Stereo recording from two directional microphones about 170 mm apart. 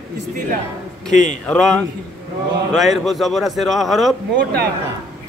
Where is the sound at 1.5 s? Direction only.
5° left (ahead or behind).